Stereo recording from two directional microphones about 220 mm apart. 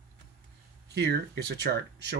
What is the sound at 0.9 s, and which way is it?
Speech, 50° right (ahead or behind).